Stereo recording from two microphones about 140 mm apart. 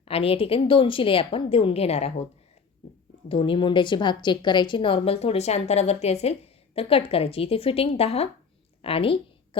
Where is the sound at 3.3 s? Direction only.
40° left (ahead or behind).